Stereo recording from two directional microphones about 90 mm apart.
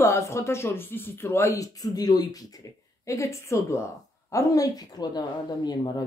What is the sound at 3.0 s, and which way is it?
Speech, 35° left (ahead or behind).